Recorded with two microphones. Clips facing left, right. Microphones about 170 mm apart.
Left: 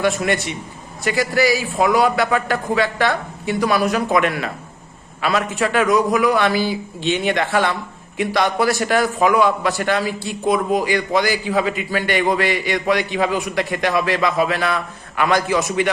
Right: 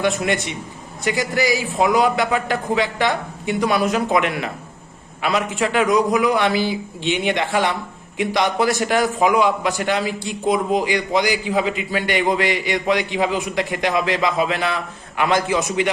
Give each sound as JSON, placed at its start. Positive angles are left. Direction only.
{"t": 0.0, "sound": "a man's voice", "side_deg": -20}